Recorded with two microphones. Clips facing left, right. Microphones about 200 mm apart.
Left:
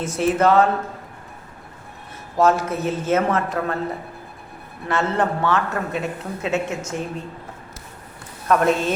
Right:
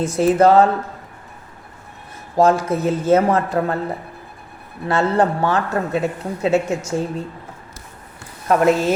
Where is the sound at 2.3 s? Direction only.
35° right (ahead or behind).